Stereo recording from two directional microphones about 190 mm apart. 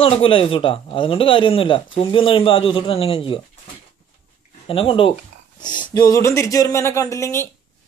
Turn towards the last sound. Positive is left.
turn(degrees=15)  # may be behind; listen again after turning